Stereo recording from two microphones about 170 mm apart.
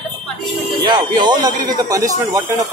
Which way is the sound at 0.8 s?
25° right (ahead or behind).